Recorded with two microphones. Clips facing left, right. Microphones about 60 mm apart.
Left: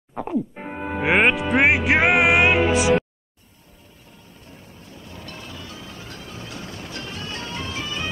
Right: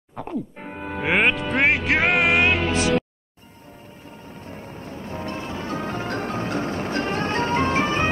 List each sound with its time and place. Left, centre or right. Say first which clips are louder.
0.1 s speech: left 4 dB; centre
4.3 s music: right 9 dB; right